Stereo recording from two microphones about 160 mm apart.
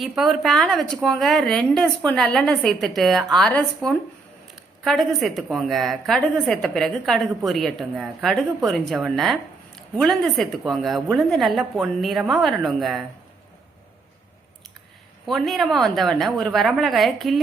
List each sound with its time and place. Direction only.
0.0 s a woman's voice: centre (ahead or behind)
15.3 s a woman's voice: centre (ahead or behind)